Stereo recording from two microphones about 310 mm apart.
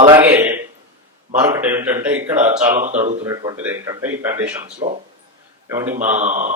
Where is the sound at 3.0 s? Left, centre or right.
Right.